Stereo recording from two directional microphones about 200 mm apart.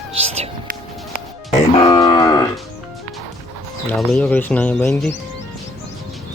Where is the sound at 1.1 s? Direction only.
35° left (ahead or behind).